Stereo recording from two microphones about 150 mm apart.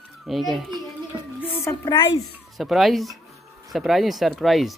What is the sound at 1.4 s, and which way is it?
Speech, 15° left (ahead or behind).